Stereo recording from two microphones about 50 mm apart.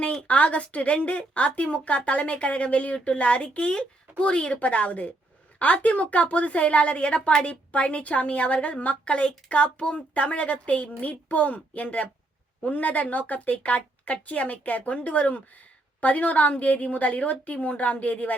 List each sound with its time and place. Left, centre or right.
0.2 s a woman's voice: left